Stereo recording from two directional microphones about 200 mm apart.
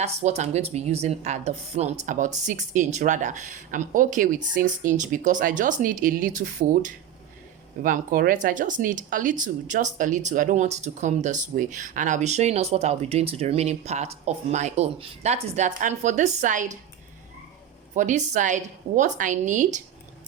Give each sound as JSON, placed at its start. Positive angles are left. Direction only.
{"t": 0.0, "sound": "speech", "side_deg": -35}
{"t": 17.9, "sound": "speech", "side_deg": -40}